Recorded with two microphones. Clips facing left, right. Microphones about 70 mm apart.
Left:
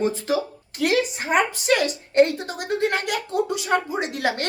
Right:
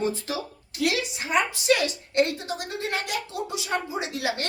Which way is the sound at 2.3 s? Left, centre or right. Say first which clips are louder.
Left 5 dB; left.